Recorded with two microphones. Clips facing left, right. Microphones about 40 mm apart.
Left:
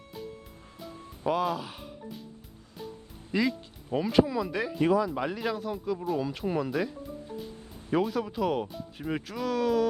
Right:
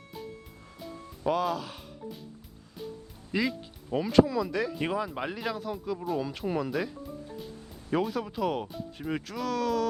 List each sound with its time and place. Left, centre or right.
0.8 s music: centre
3.3 s speech: centre
4.8 s speech: right
5.4 s speech: centre
7.9 s speech: centre